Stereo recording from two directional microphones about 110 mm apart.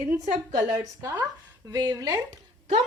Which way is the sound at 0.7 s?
35° right (ahead or behind).